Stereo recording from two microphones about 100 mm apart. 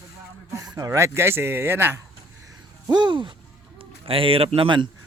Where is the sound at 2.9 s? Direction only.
50° right (ahead or behind).